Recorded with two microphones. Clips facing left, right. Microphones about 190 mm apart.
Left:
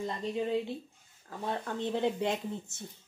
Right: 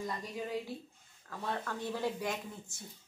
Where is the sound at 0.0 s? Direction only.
25° left (ahead or behind).